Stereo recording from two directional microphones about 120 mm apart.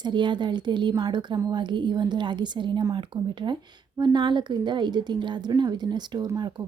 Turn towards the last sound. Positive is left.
turn(degrees=-40)  # may be behind; listen again after turning